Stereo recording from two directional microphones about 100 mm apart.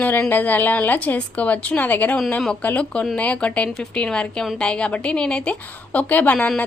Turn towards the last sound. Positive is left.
turn(degrees=15)  # may be behind; listen again after turning